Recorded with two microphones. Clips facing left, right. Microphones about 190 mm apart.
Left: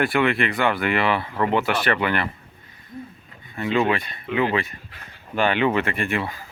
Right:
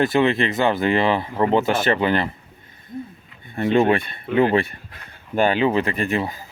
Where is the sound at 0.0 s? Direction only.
25° right (ahead or behind).